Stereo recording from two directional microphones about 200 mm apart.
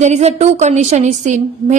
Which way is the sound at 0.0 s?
35° right (ahead or behind).